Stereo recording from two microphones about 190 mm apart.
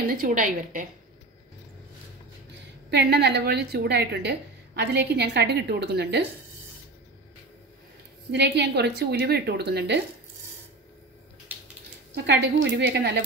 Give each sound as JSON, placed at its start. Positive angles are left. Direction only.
{"t": 0.0, "sound": "a woman's voice", "side_deg": -50}
{"t": 2.9, "sound": "a woman's voice", "side_deg": -60}
{"t": 8.3, "sound": "a woman's voice", "side_deg": -60}
{"t": 12.3, "sound": "a woman's voice", "side_deg": -70}